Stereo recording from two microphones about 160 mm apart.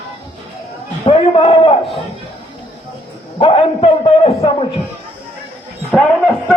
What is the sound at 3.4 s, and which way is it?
A man's voice, 35° left (ahead or behind).